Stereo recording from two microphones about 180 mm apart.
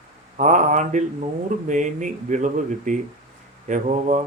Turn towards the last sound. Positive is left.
turn(degrees=-40)  # may be behind; listen again after turning